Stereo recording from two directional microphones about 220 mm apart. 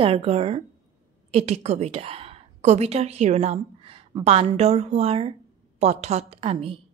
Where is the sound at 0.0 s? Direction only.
25° right (ahead or behind).